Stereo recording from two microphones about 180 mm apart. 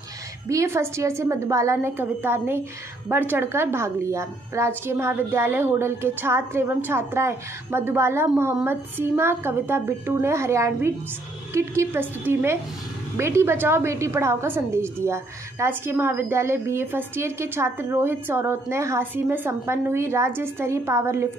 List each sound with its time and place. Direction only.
0.5 s a woman's voice: 15° right (ahead or behind)